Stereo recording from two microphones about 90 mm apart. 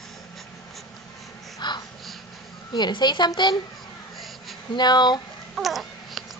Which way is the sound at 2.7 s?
55° left (ahead or behind).